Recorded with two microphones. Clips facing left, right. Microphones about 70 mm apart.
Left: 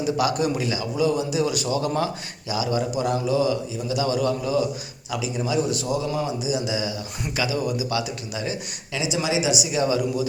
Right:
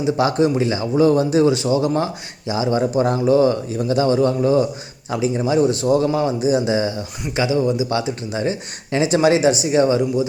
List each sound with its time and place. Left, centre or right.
0.0 s speech: right
6.1 s speech: right
9.5 s speech: right